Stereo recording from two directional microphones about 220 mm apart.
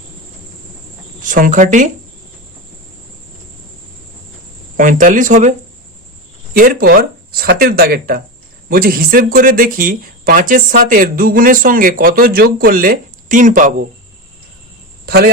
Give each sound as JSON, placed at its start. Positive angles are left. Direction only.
{"t": 1.2, "sound": "speech", "side_deg": -35}
{"t": 4.8, "sound": "speech", "side_deg": -35}
{"t": 15.0, "sound": "speech", "side_deg": -45}